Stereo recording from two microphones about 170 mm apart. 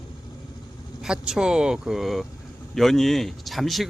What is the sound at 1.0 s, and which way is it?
Speech, 5° right (ahead or behind).